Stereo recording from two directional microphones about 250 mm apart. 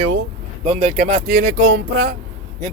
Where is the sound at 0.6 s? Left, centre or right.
Right.